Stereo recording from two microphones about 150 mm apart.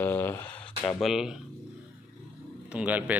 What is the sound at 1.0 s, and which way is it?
Speech, centre (ahead or behind).